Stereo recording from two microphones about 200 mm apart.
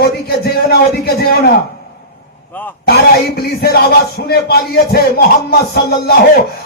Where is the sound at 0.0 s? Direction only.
50° left (ahead or behind).